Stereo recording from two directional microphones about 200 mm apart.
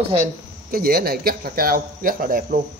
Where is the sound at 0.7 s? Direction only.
50° right (ahead or behind).